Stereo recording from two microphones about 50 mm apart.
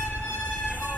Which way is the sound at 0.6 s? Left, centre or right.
Right.